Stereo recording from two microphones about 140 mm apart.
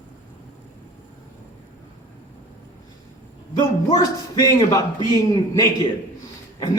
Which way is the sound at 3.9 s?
25° left (ahead or behind).